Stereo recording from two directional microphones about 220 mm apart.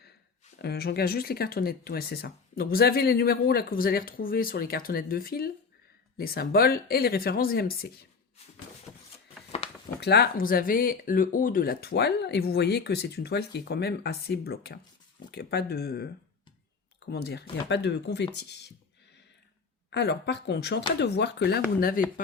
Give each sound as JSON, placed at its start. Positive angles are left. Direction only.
{"t": 0.6, "sound": "speech", "side_deg": 45}
{"t": 9.6, "sound": "a sound", "side_deg": 25}
{"t": 10.0, "sound": "speech", "side_deg": 50}
{"t": 17.7, "sound": "speech", "side_deg": 50}
{"t": 19.9, "sound": "speech", "side_deg": 50}